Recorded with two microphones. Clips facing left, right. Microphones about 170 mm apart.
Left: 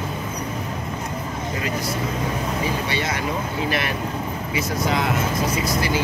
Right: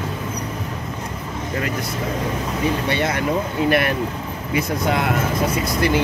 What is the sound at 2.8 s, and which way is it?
Speech, 55° right (ahead or behind).